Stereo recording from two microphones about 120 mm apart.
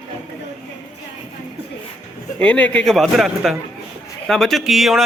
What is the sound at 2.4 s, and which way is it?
A man's voice, 10° left (ahead or behind).